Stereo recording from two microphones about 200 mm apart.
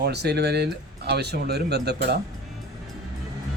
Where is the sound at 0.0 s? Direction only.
55° right (ahead or behind).